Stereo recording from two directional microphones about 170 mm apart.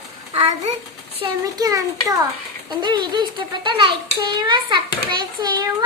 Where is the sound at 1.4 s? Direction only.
20° right (ahead or behind).